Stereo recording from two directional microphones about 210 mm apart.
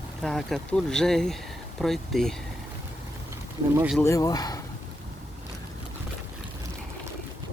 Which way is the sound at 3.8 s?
5° right (ahead or behind).